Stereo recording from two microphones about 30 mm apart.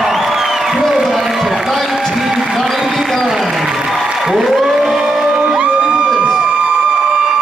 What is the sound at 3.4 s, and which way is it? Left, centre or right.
Applause, centre.